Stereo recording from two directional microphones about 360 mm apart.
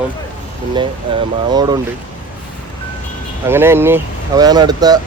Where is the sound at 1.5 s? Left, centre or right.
Centre.